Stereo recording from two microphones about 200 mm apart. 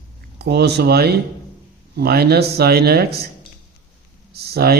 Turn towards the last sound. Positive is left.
turn(degrees=-50)  # may be behind; listen again after turning